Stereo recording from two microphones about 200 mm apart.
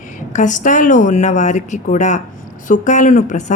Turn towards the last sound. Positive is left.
turn(degrees=40)  # may be behind; listen again after turning